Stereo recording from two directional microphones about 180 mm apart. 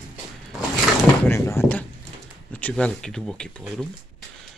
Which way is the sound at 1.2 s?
15° left (ahead or behind).